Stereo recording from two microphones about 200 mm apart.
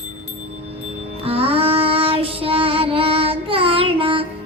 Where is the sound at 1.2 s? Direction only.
30° right (ahead or behind).